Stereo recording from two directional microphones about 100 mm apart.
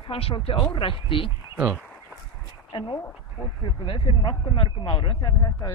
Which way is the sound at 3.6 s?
60° left (ahead or behind).